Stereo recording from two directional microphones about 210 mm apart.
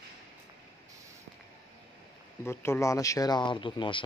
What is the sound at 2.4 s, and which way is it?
Speech, 10° left (ahead or behind).